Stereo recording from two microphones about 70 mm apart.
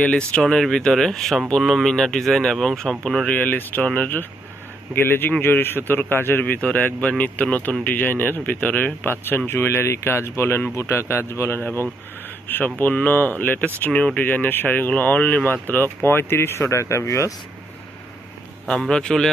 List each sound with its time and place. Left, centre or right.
0.3 s speech: centre
3.3 s speech: left
18.7 s speech: centre